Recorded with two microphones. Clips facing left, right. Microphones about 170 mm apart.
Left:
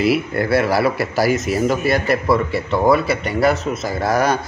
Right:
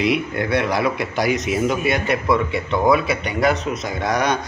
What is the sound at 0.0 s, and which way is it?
A man's voice, 5° left (ahead or behind).